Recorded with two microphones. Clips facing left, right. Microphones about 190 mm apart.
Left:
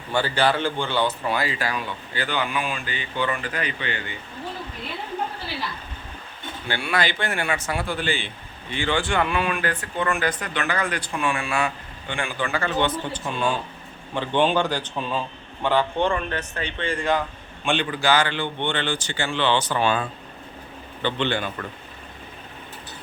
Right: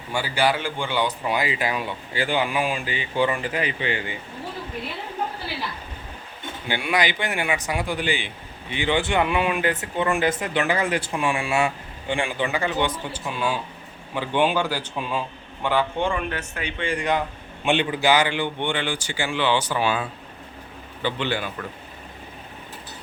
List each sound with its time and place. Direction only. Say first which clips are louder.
0.1 s speech: left 1 dB; 10° right (ahead or behind); by 2.5 s 25° right (ahead or behind)
2.5 s speech: right 3 dB; 15° right (ahead or behind)
3.2 s speech: right 4 dB; 25° right (ahead or behind)
6.7 s speech: right 1 dB; 15° right (ahead or behind)